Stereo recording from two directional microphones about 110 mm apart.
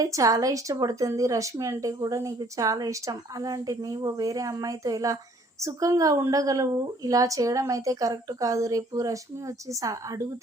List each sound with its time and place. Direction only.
0.0 s a woman's voice: 30° right (ahead or behind)